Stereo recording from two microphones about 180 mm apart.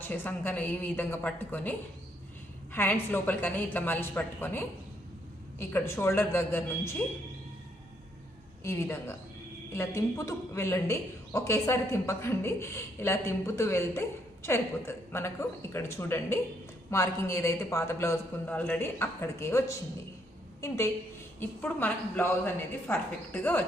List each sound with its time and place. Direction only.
0.0 s a woman's voice: 10° left (ahead or behind)
2.7 s a woman's voice: 10° left (ahead or behind)
8.6 s a woman's voice: 15° left (ahead or behind)